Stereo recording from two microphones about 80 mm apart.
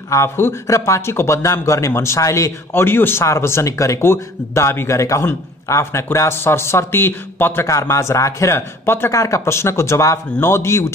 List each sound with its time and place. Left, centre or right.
0.1 s a man's voice: left
7.6 s a man's voice: left